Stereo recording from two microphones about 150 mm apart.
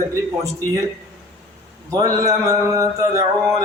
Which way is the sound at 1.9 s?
25° right (ahead or behind).